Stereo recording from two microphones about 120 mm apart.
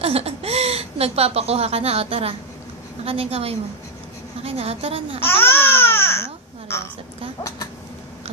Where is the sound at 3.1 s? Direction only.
55° right (ahead or behind).